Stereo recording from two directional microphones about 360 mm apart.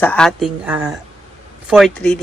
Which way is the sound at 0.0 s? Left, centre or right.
Centre.